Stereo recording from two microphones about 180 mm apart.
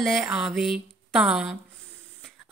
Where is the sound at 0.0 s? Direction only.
Centre (ahead or behind).